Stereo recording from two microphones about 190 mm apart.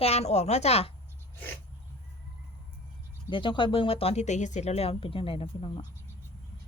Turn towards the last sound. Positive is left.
turn(degrees=25)  # may be behind; listen again after turning